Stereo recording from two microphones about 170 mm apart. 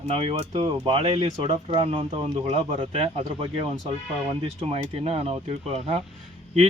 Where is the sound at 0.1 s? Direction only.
35° right (ahead or behind).